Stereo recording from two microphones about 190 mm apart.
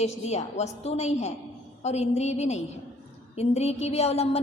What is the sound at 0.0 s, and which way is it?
A woman's voice, 35° left (ahead or behind).